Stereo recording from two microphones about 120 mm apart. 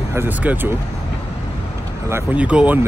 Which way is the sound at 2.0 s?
15° right (ahead or behind).